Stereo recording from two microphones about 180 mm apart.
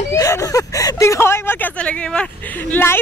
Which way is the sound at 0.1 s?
15° left (ahead or behind).